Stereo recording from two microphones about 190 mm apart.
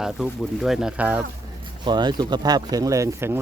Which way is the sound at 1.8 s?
25° right (ahead or behind).